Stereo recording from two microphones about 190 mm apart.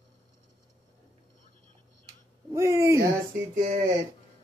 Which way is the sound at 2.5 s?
15° right (ahead or behind).